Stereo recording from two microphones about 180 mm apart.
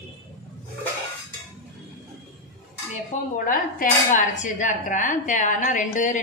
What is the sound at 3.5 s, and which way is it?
Speech, 45° left (ahead or behind).